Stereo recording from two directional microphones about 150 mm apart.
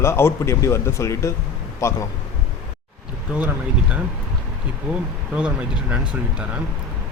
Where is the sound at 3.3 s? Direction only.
10° right (ahead or behind).